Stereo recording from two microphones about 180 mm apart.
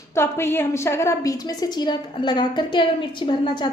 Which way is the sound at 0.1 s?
15° left (ahead or behind).